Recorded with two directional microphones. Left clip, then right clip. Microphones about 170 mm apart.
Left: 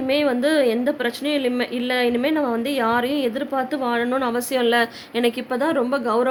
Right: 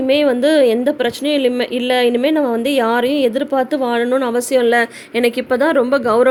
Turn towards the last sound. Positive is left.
turn(degrees=-25)  # may be behind; listen again after turning